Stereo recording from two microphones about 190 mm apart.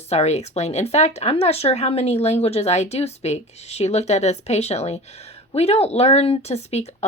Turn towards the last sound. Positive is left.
turn(degrees=35)  # may be behind; listen again after turning